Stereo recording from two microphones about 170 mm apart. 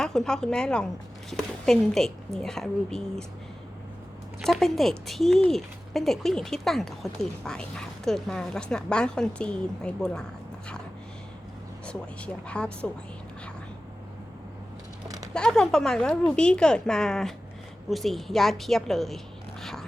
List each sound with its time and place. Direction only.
0.0 s speech: 5° left (ahead or behind)
4.4 s speech: centre (ahead or behind)
11.9 s speech: 5° left (ahead or behind)
15.0 s a sound: 20° right (ahead or behind)
15.3 s speech: 5° left (ahead or behind)